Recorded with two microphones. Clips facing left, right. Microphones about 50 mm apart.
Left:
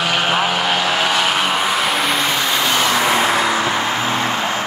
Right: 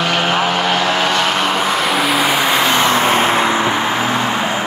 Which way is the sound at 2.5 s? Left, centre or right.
Right.